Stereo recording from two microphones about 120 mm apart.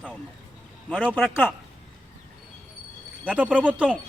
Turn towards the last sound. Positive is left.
turn(degrees=-10)  # may be behind; listen again after turning